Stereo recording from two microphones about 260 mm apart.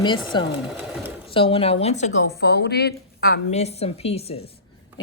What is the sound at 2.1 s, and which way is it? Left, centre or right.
A woman's voice, left.